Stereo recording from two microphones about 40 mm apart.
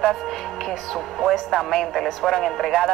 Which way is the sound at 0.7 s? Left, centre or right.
Centre.